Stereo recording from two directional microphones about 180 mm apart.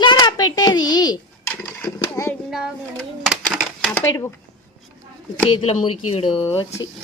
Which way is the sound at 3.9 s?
15° left (ahead or behind).